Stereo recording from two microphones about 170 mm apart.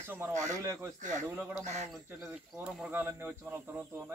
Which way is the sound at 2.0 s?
5° right (ahead or behind).